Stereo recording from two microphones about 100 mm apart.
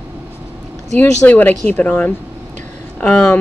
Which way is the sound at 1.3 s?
15° left (ahead or behind).